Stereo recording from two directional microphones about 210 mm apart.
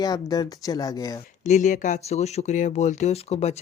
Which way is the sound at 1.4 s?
35° left (ahead or behind).